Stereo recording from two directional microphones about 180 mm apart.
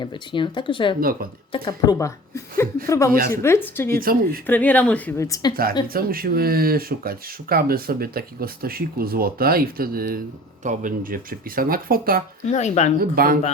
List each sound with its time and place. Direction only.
0.0 s a woman's voice: 25° left (ahead or behind)
3.1 s speech: 50° right (ahead or behind)
3.4 s speech: 15° left (ahead or behind)
3.9 s speech: 55° right (ahead or behind)
4.4 s speech: 10° left (ahead or behind)
5.9 s speech: 55° right (ahead or behind)
12.5 s a woman's voice: 40° left (ahead or behind)
13.0 s speech: 55° right (ahead or behind)